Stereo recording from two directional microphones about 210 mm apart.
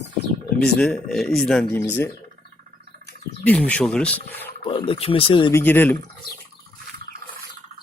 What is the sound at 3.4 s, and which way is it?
Speech, 5° left (ahead or behind).